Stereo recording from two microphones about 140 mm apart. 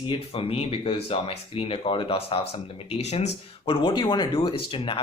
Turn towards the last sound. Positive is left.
turn(degrees=35)  # may be behind; listen again after turning